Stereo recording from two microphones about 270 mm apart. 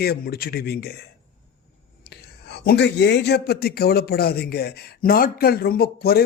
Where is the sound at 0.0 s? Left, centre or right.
Left.